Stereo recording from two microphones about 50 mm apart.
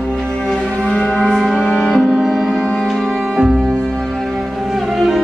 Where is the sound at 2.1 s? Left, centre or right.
Centre.